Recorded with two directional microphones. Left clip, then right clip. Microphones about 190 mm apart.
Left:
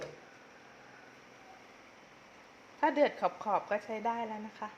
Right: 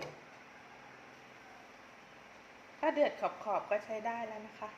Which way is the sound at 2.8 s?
50° left (ahead or behind).